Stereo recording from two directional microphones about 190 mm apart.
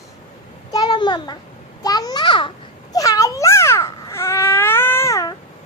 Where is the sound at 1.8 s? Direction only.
20° left (ahead or behind).